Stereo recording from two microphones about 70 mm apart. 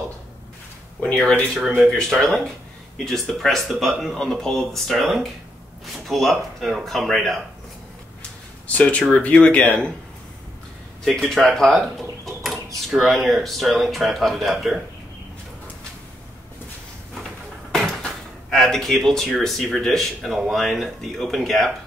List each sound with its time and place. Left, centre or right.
1.5 s speech: centre
8.6 s speech: centre
11.1 s speech: centre
17.7 s speech: centre